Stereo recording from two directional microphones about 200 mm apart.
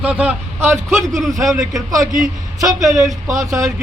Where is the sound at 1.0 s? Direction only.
Centre (ahead or behind).